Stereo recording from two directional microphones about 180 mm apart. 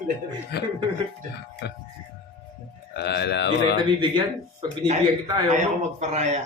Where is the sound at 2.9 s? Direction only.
70° left (ahead or behind).